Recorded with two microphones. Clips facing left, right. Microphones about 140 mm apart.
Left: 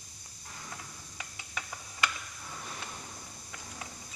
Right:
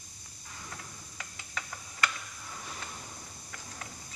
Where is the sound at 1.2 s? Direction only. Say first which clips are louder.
Even; 15° left (ahead or behind).